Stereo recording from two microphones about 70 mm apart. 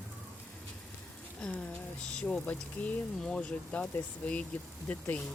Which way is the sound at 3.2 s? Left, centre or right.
Centre.